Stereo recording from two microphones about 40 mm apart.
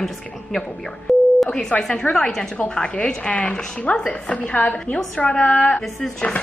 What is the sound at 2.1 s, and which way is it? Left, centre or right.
A woman's voice, centre.